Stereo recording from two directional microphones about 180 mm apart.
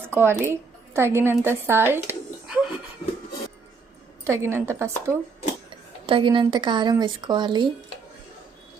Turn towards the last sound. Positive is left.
turn(degrees=-25)  # may be behind; listen again after turning